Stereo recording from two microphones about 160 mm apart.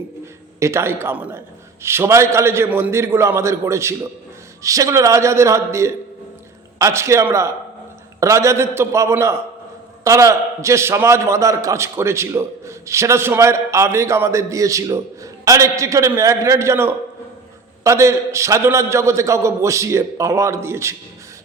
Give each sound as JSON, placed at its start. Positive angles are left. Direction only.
{"t": 0.6, "sound": "a man's voice", "side_deg": -15}